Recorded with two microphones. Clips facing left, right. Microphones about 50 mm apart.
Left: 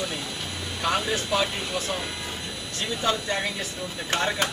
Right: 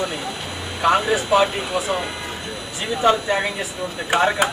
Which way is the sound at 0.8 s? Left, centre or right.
Centre.